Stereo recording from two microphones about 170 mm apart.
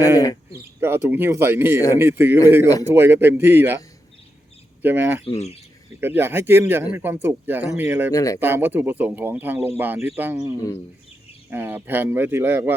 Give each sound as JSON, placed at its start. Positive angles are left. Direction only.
{"t": 0.8, "sound": "a man's voice", "side_deg": -15}
{"t": 4.8, "sound": "a man's voice", "side_deg": -10}
{"t": 5.2, "sound": "speech", "side_deg": 40}
{"t": 6.0, "sound": "a man's voice", "side_deg": -15}
{"t": 8.1, "sound": "speech", "side_deg": 20}
{"t": 8.4, "sound": "a man's voice", "side_deg": -15}